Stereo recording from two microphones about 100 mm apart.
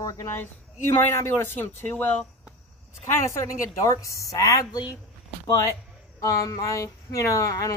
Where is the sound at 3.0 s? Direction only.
30° left (ahead or behind).